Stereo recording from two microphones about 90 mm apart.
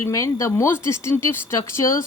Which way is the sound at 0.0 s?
35° left (ahead or behind).